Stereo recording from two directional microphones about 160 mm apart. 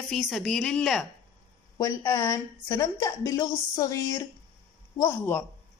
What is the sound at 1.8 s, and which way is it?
A woman's voice, 20° left (ahead or behind).